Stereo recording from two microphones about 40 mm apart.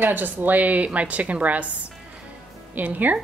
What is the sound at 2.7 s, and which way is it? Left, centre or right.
Speech, right.